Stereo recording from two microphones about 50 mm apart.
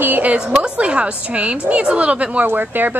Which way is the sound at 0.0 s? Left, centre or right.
Right.